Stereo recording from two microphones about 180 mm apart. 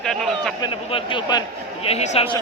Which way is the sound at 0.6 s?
30° left (ahead or behind).